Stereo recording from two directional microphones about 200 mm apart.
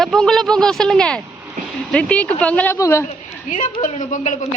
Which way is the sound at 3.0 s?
40° left (ahead or behind).